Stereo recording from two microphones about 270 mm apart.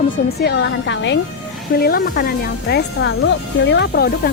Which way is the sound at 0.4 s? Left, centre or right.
Left.